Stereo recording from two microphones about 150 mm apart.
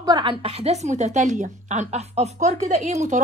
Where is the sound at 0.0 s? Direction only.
30° right (ahead or behind).